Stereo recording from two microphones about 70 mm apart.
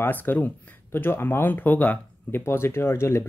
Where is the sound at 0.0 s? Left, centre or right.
Left.